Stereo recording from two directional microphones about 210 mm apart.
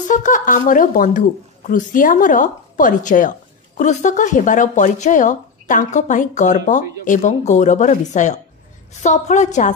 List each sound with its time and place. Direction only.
0.1 s a woman's voice: 40° left (ahead or behind)